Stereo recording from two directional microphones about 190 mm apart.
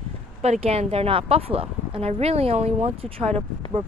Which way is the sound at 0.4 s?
35° right (ahead or behind).